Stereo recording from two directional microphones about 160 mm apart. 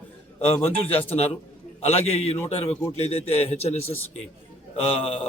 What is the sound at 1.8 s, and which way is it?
A man's voice, 40° left (ahead or behind).